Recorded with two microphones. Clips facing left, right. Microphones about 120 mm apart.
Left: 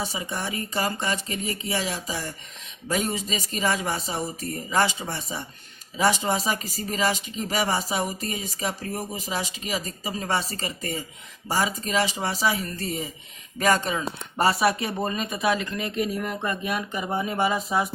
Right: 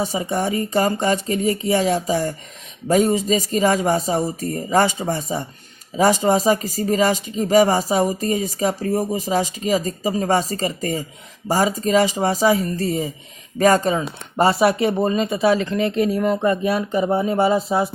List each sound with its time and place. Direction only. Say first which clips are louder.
0.3 s speech: right 9 dB; 45° right (ahead or behind)
14.3 s speech: right 6 dB; 25° right (ahead or behind)